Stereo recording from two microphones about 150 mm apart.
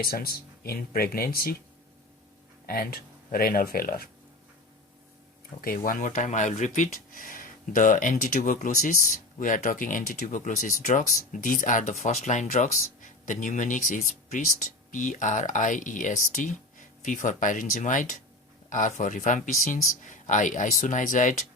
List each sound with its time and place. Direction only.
0.0 s speech: 90° left
2.6 s speech: 90° left
5.6 s speech: 65° left (ahead or behind)